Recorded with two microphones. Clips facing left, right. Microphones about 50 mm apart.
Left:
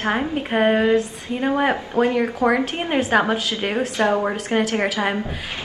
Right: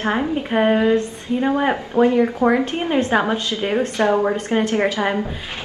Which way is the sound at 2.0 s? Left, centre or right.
Right.